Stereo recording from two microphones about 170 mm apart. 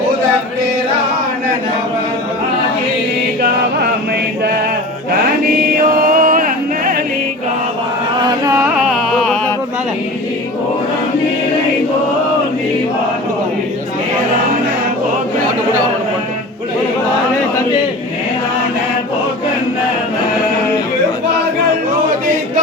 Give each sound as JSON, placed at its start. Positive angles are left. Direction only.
{"t": 6.0, "sound": "music", "side_deg": -55}
{"t": 8.2, "sound": "carnatic music", "side_deg": -25}
{"t": 8.7, "sound": "music", "side_deg": 0}